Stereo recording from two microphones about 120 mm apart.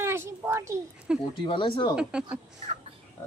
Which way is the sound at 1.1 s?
5° right (ahead or behind).